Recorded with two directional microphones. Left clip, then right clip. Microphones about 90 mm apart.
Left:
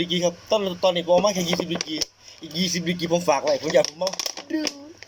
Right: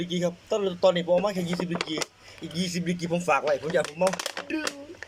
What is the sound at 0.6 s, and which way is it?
Speech, 10° right (ahead or behind).